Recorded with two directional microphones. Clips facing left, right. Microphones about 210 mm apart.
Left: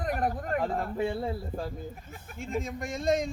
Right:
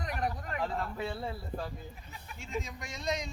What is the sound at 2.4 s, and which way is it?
Speech, 50° left (ahead or behind).